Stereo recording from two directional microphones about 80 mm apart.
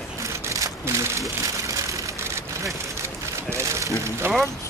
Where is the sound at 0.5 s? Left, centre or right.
Right.